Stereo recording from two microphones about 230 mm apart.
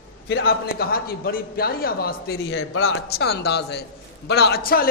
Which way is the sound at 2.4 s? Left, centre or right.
Left.